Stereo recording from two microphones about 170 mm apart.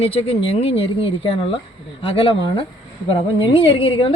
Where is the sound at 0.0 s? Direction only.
35° left (ahead or behind).